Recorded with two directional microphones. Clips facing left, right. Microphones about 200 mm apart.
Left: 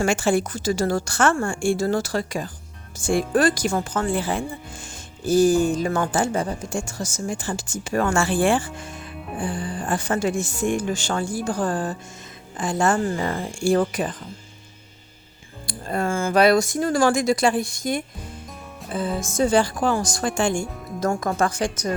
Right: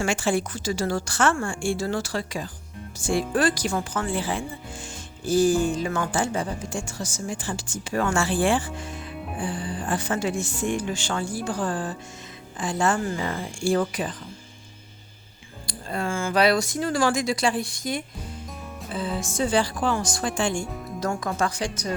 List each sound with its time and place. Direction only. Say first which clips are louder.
0.0 s speech: left 4 dB; 45° left (ahead or behind)
15.6 s speech: left 4 dB; 50° left (ahead or behind)